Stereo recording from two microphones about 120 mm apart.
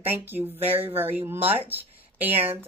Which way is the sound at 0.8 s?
20° right (ahead or behind).